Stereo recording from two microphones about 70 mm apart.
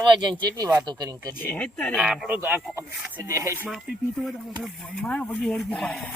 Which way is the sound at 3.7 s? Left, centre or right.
Centre.